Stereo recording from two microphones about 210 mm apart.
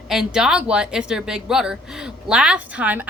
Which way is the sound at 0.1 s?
Centre (ahead or behind).